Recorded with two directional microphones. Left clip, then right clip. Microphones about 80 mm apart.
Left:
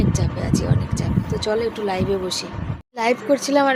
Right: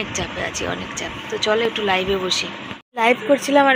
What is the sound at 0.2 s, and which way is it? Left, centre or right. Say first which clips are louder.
Speech: right 1 dB; left.